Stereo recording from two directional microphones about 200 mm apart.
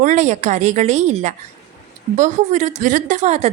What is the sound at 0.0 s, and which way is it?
A woman's voice, 40° right (ahead or behind).